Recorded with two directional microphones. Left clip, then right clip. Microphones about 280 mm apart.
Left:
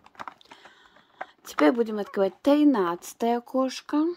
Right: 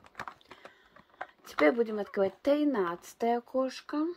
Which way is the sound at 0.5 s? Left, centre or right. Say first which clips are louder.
Left 2 dB; left.